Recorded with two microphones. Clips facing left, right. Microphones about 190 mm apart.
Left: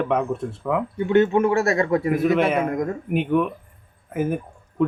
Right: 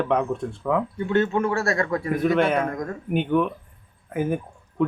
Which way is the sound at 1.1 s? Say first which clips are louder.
Left 5 dB; 20° left (ahead or behind).